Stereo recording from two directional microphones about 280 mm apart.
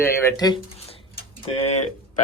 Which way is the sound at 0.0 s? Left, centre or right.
Centre.